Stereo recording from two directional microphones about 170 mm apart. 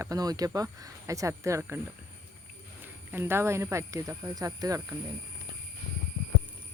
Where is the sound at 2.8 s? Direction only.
15° right (ahead or behind).